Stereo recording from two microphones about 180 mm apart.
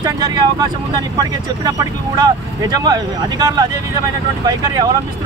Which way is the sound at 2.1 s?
20° right (ahead or behind).